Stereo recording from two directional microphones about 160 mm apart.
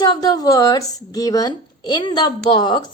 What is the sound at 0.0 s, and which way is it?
Speech, 25° left (ahead or behind).